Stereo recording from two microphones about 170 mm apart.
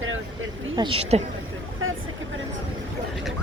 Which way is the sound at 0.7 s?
30° right (ahead or behind).